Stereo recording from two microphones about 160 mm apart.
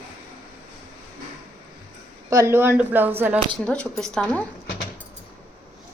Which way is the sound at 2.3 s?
20° right (ahead or behind).